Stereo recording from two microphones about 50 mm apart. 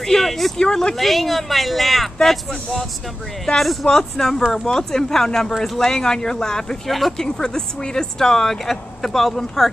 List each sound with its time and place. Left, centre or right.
0.0 s speech: centre
0.7 s speech: centre
0.9 s speech: centre